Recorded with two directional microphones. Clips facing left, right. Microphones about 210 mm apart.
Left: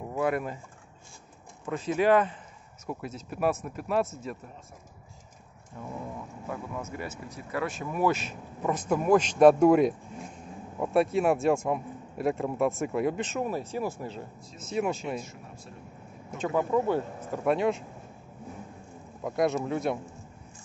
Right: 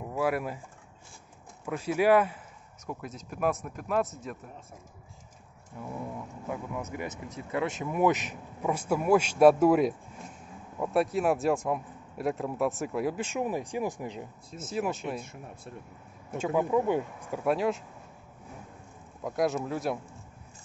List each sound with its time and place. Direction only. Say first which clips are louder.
0.1 s speech: left 1 dB; 5° right (ahead or behind)
1.7 s speech: even; 10° right (ahead or behind)
2.9 s a man's voice: left 3 dB; centre (ahead or behind)
5.8 s a man's voice: right 1 dB; 10° right (ahead or behind)
14.7 s a man's voice: left 2 dB; centre (ahead or behind)
16.3 s speech: even; 10° right (ahead or behind)
17.5 s a man's voice: left 2 dB; centre (ahead or behind)
19.2 s a man's voice: left 2 dB; centre (ahead or behind)